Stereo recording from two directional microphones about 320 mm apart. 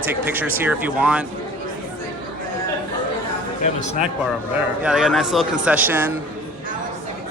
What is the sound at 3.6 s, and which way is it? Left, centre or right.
Speech, left.